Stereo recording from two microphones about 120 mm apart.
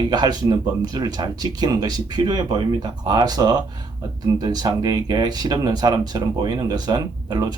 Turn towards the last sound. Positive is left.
turn(degrees=-35)  # may be behind; listen again after turning